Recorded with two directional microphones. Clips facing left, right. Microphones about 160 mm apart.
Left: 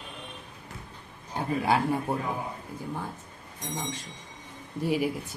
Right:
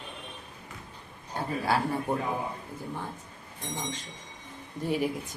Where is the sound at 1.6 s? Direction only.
15° left (ahead or behind).